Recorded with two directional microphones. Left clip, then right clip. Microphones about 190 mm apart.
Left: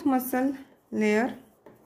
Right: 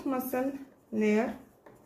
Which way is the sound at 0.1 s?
45° left (ahead or behind).